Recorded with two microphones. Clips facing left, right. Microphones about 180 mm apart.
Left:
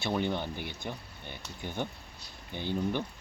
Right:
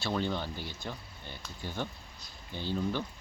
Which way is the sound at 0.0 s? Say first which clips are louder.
Left 2 dB; 15° left (ahead or behind).